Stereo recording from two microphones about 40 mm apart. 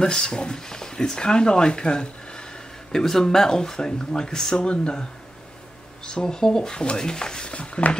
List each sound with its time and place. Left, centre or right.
0.0 s speech: centre
2.9 s speech: centre
6.0 s speech: centre
7.5 s speech: left